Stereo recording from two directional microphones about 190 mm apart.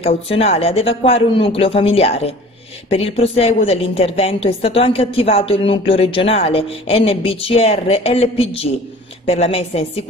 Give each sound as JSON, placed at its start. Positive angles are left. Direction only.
{"t": 0.0, "sound": "a woman's voice", "side_deg": 30}